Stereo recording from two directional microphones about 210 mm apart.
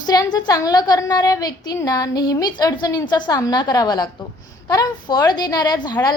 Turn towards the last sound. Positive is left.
turn(degrees=20)  # may be behind; listen again after turning